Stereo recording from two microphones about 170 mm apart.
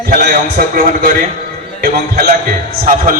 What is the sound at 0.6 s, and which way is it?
Speech, 60° right (ahead or behind).